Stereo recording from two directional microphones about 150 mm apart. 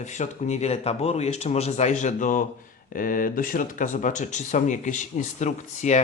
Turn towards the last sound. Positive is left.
turn(degrees=50)  # may be behind; listen again after turning